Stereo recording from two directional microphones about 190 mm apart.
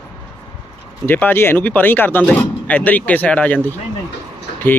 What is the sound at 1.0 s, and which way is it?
Speech, 10° left (ahead or behind).